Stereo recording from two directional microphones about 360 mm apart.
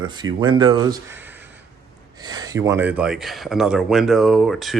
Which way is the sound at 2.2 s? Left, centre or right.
Centre.